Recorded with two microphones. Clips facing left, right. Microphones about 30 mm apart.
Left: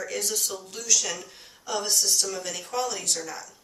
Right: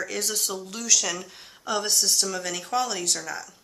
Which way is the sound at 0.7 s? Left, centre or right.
Right.